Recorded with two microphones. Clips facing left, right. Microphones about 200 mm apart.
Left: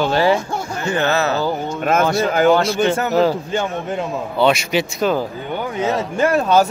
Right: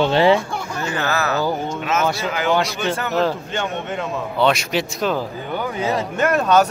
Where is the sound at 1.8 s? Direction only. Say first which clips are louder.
Left 4 dB; 55° left (ahead or behind).